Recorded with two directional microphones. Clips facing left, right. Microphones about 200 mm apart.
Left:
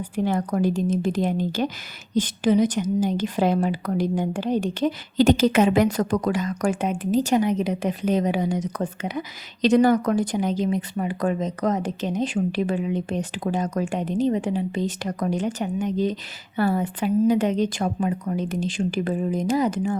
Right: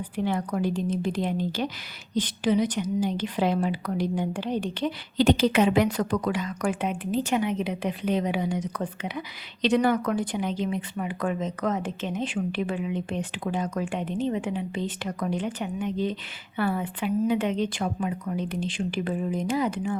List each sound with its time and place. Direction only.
0.2 s a woman's voice: 45° left (ahead or behind)